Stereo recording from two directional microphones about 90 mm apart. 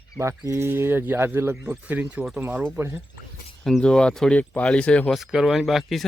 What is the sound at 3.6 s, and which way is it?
Speech, 5° left (ahead or behind).